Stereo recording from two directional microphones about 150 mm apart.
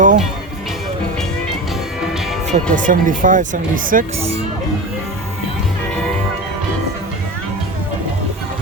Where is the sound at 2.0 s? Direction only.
Centre (ahead or behind).